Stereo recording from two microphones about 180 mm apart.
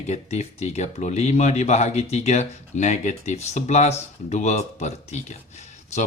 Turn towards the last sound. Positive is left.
turn(degrees=40)  # may be behind; listen again after turning